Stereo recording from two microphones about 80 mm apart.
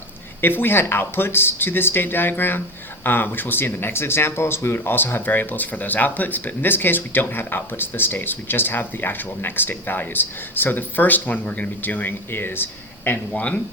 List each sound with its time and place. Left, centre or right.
0.4 s speech: left
13.1 s speech: centre